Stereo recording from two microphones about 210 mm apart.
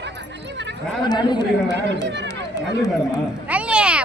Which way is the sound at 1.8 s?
55° right (ahead or behind).